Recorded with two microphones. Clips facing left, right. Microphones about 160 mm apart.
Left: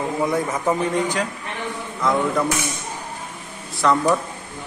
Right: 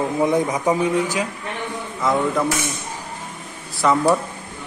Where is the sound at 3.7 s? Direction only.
5° right (ahead or behind).